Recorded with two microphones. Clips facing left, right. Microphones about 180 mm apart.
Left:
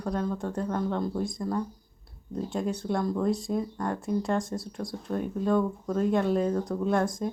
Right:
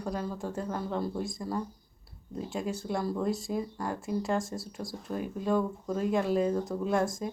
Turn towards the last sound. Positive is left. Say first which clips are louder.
# left 2 dB
turn(degrees=0)  # may be behind; listen again after turning